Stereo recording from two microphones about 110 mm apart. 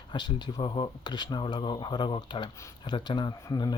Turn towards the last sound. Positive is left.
turn(degrees=40)  # may be behind; listen again after turning